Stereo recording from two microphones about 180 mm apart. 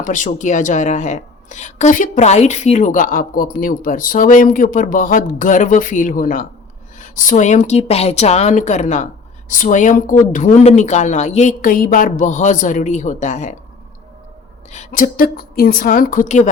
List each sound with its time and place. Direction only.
0.0 s a woman's voice: 45° left (ahead or behind)
14.7 s a woman's voice: 40° left (ahead or behind)